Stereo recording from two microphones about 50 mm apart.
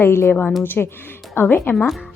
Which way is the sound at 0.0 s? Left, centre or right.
Left.